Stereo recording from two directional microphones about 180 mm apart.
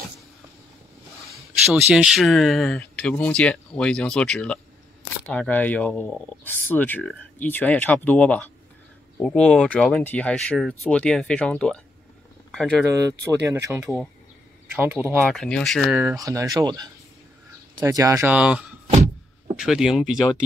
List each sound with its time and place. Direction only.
1.3 s speech: 5° right (ahead or behind)
13.2 s speech: 15° right (ahead or behind)
15.2 s speech: 5° left (ahead or behind)
16.0 s speech: 15° right (ahead or behind)